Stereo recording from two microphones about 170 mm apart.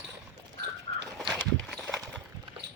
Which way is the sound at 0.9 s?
35° left (ahead or behind).